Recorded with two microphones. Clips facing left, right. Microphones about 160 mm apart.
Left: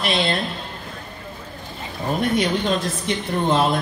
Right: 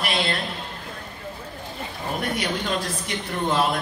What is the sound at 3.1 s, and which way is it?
Speech, 25° left (ahead or behind).